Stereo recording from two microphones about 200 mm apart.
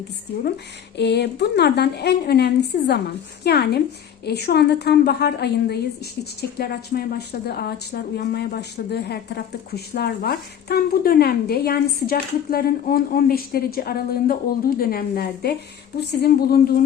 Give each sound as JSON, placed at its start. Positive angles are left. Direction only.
{"t": 0.9, "sound": "a woman's voice", "side_deg": 60}